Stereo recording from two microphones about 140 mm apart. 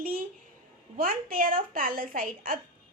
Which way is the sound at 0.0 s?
90° right.